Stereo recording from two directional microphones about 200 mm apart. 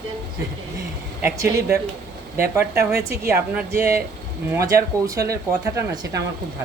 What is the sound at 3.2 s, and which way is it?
Speech, 5° right (ahead or behind).